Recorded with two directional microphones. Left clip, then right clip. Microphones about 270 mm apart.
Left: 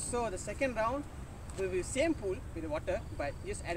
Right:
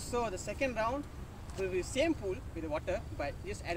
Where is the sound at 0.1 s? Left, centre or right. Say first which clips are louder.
Right 1 dB; centre.